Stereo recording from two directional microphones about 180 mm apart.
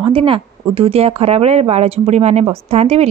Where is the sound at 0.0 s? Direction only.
30° right (ahead or behind).